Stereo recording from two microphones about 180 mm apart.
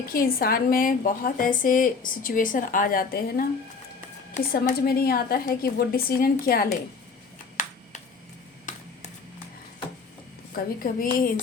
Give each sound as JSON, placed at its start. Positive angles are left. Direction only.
{"t": 0.1, "sound": "a woman's voice", "side_deg": 55}
{"t": 8.7, "sound": "a sound", "side_deg": 45}
{"t": 10.5, "sound": "a woman's voice", "side_deg": 50}